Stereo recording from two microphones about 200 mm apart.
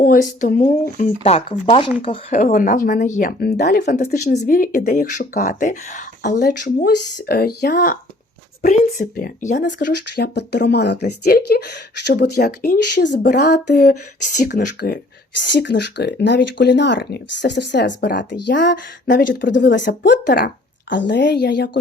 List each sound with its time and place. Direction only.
0.0 s speech: 40° left (ahead or behind)
1.2 s speech: 30° left (ahead or behind)
2.3 s speech: 40° left (ahead or behind)
6.4 s speech: 55° left (ahead or behind)
9.8 s speech: 55° left (ahead or behind)
13.7 s speech: 40° left (ahead or behind)
14.5 s speech: 50° left (ahead or behind)
20.9 s speech: 60° left (ahead or behind)